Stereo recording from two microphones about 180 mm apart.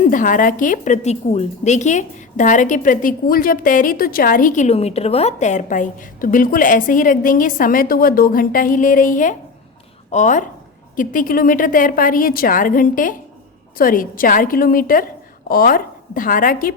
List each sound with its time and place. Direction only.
0.0 s a woman's voice: 50° left (ahead or behind)